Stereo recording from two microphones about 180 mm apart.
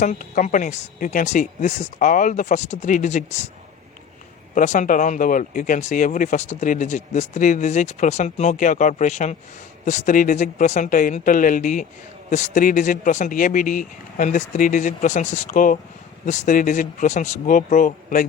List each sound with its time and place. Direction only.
0.0 s speech: 45° left (ahead or behind)
4.5 s speech: 45° left (ahead or behind)